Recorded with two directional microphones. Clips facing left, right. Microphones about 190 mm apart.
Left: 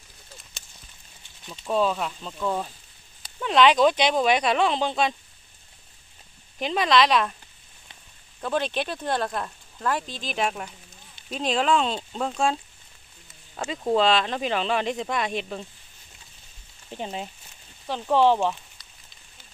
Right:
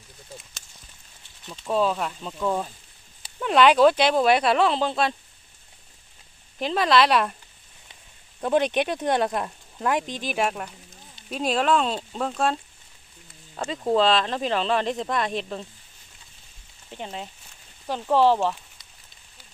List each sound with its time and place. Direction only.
1.5 s speech: 5° right (ahead or behind)
6.6 s speech: centre (ahead or behind)
8.4 s speech: 15° right (ahead or behind)
13.7 s speech: centre (ahead or behind)
16.9 s speech: 20° left (ahead or behind)
17.8 s speech: 5° right (ahead or behind)